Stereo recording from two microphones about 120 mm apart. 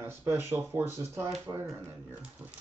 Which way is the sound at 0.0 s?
20° right (ahead or behind).